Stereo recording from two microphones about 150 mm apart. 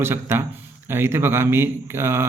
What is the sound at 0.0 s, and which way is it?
Speech, 15° right (ahead or behind).